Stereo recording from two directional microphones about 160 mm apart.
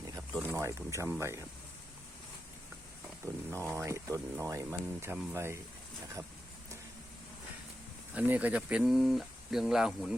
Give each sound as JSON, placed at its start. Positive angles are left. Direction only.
{"t": 0.4, "sound": "speech", "side_deg": -15}
{"t": 3.5, "sound": "speech", "side_deg": -15}
{"t": 8.1, "sound": "speech", "side_deg": -10}